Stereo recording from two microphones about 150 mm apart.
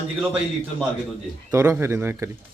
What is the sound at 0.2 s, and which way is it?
Speech, 15° right (ahead or behind).